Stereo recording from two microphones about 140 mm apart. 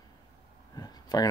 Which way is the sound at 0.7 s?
25° left (ahead or behind).